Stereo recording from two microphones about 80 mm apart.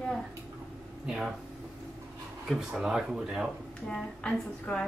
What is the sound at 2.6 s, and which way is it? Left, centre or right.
Speech, centre.